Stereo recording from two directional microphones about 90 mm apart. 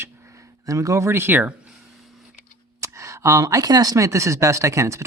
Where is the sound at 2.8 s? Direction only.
35° right (ahead or behind).